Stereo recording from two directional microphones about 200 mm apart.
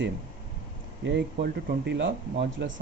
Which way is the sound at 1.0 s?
60° right (ahead or behind).